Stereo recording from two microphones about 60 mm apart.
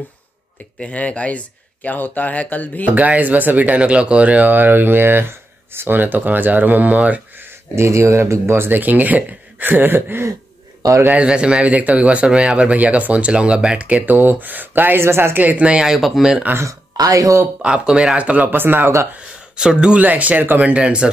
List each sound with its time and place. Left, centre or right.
0.9 s speech: left
2.9 s speech: right
7.7 s speech: right
10.8 s a man's voice: right
11.1 s speech: centre
15.0 s speech: right
15.3 s speech: right; by 16.4 s centre
16.9 s speech: right
17.6 s speech: centre; by 18.9 s right
19.5 s speech: centre
20.0 s speech: right